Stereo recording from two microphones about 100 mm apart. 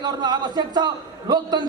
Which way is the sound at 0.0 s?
45° right (ahead or behind).